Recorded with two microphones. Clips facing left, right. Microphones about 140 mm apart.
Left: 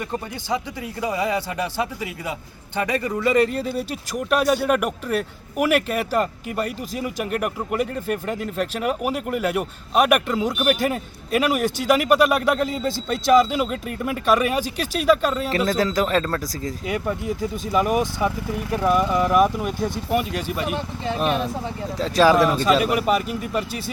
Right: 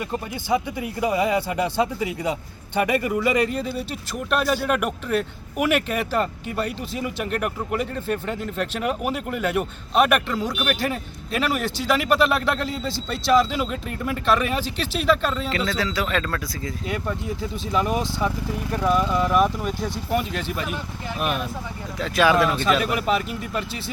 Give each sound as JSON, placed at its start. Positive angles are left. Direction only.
{"t": 0.5, "sound": "a man's voice", "side_deg": -15}
{"t": 15.4, "sound": "speech", "side_deg": 40}
{"t": 17.2, "sound": "speech", "side_deg": 5}
{"t": 20.7, "sound": "speech", "side_deg": 30}
{"t": 22.8, "sound": "speech", "side_deg": 5}